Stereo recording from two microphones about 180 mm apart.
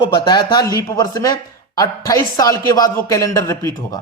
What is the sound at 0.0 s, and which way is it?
Speech, 25° left (ahead or behind).